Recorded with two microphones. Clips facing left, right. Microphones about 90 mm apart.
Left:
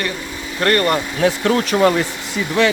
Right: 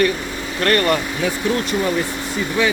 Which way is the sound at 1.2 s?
90° left.